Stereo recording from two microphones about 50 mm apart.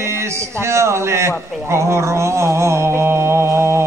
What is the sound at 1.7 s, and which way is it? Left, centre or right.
Mantra, right.